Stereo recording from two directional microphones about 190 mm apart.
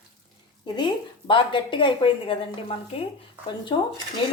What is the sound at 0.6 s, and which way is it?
A woman's voice, 25° left (ahead or behind).